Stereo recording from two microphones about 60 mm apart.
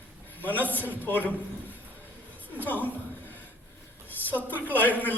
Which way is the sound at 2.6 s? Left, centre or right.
Left.